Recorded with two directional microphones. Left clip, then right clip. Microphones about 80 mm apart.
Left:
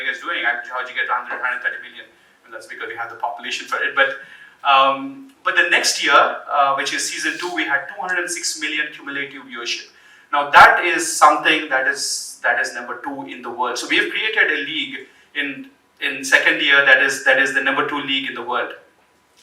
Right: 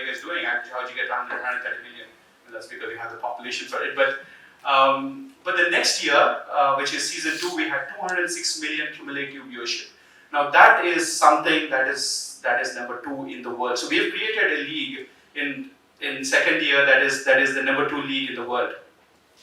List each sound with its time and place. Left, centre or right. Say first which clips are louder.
0.0 s a man's voice: left 6 dB; left
2.6 s a man's voice: left 4 dB; left
16.0 s speech: left 5 dB; left